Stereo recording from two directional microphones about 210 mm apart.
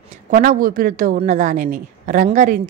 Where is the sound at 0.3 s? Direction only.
40° right (ahead or behind).